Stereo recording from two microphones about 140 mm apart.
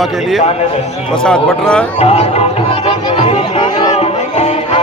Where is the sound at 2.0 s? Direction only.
45° left (ahead or behind).